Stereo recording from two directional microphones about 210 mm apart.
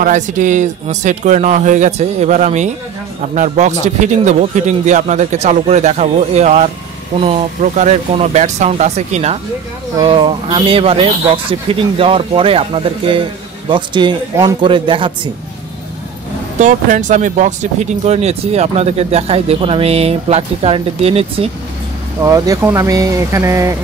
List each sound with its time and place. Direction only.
0.0 s a man's voice: 35° right (ahead or behind)
16.5 s speech: 35° right (ahead or behind)
22.2 s speech: 15° right (ahead or behind)